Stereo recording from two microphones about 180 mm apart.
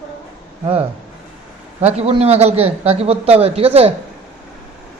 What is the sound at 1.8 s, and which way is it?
A man's voice, 35° right (ahead or behind).